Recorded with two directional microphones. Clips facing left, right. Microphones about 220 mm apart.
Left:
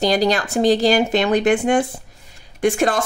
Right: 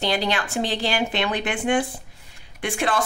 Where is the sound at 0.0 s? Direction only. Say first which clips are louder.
Left 7 dB; 40° left (ahead or behind).